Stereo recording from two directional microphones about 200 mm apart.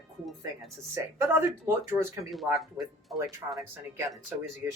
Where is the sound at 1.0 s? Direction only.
15° right (ahead or behind).